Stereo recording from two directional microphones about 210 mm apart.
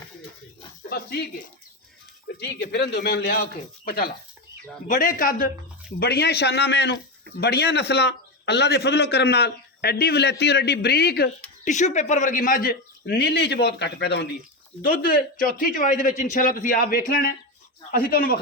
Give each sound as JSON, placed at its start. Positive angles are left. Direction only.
{"t": 0.9, "sound": "a man's voice", "side_deg": 50}